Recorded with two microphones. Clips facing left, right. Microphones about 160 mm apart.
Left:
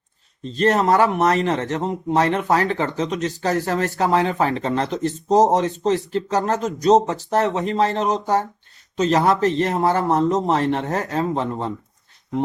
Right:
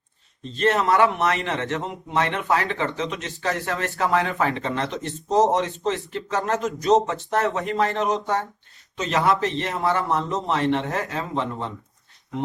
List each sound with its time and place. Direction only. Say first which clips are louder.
0.5 s speech: left 3 dB; 40° left (ahead or behind)